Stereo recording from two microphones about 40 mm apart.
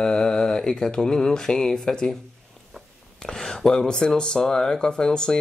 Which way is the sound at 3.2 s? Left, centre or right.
Centre.